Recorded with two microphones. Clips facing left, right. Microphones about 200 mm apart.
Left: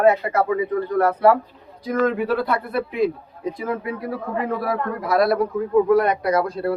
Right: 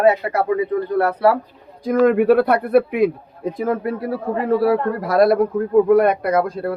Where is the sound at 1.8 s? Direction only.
55° right (ahead or behind).